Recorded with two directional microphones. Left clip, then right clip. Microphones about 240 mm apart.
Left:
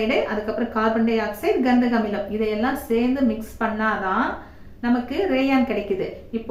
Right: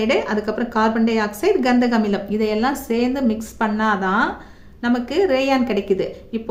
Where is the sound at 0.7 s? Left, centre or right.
Right.